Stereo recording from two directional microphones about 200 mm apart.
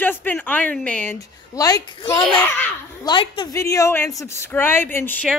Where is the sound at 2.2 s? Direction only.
10° left (ahead or behind).